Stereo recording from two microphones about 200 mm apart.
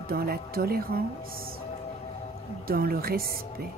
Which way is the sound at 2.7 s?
50° right (ahead or behind).